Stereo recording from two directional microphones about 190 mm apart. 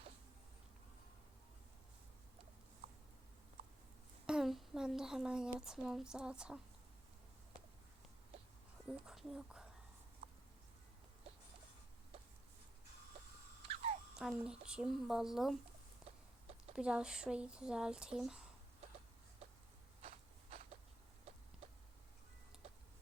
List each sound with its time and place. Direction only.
4.3 s speech: centre (ahead or behind)
9.0 s speech: 5° right (ahead or behind)
13.7 s a sound: 35° right (ahead or behind)
14.2 s speech: 5° right (ahead or behind)
16.0 s chicken: 35° right (ahead or behind)
16.7 s speech: 5° right (ahead or behind)
20.0 s a sound: 35° right (ahead or behind)